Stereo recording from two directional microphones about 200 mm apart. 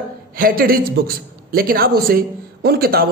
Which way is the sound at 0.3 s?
45° right (ahead or behind).